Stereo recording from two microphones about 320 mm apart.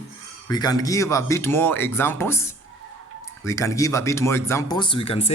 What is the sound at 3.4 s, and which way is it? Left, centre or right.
Speech, centre.